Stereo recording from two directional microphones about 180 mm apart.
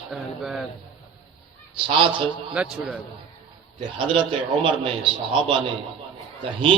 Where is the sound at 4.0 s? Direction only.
30° right (ahead or behind).